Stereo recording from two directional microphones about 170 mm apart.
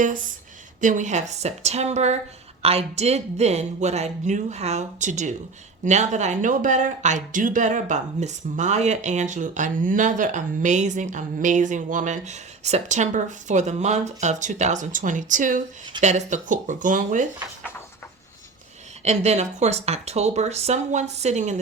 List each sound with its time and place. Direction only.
0.0 s speech: 50° right (ahead or behind)
19.0 s speech: 40° right (ahead or behind)